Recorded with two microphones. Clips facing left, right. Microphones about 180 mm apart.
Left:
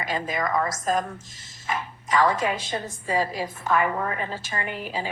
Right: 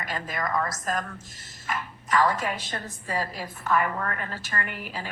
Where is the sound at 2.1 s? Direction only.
25° left (ahead or behind).